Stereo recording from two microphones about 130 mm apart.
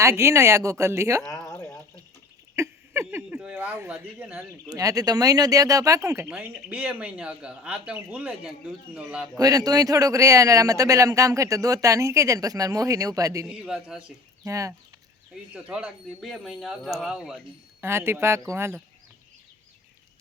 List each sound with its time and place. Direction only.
0.0 s speech: 20° right (ahead or behind)
1.3 s a sound: 25° left (ahead or behind)
2.6 s a sound: 20° right (ahead or behind)
4.7 s speech: 25° right (ahead or behind)
6.3 s speech: 10° right (ahead or behind)
9.4 s speech: 30° right (ahead or behind)
13.5 s speech: 5° right (ahead or behind)
14.4 s speech: 25° right (ahead or behind)
15.5 s speech: 10° right (ahead or behind)
17.7 s speech: 20° right (ahead or behind)